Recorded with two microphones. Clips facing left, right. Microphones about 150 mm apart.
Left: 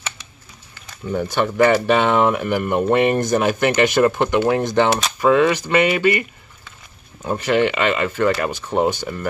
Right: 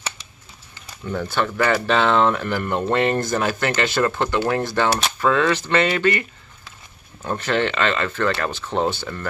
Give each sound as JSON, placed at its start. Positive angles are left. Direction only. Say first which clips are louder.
{"t": 1.0, "sound": "speech", "louder": "left 3 dB", "side_deg": 15}